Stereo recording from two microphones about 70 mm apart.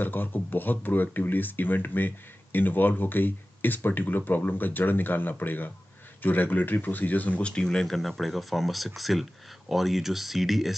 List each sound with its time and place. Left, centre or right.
0.0 s speech: left; by 10.7 s centre